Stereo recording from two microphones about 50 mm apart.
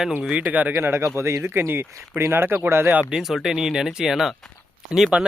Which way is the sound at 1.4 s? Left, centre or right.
Right.